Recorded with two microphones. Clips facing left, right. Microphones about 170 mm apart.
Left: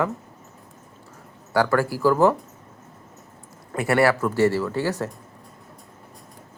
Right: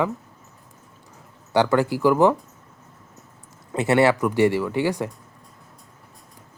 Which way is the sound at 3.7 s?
20° right (ahead or behind).